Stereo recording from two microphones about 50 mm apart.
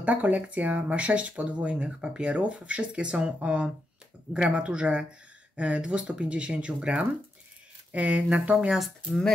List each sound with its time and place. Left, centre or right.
0.0 s speech: right
8.7 s speech: centre